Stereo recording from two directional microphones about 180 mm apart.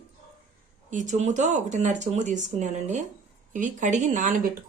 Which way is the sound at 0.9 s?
45° right (ahead or behind).